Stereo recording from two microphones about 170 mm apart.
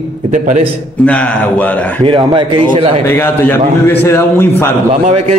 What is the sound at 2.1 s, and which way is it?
Speech, 30° right (ahead or behind).